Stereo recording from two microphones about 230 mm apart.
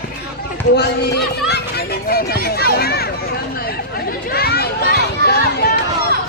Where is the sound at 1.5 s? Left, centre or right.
Left.